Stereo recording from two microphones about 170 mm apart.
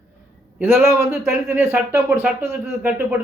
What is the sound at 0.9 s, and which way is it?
Speech, 15° right (ahead or behind).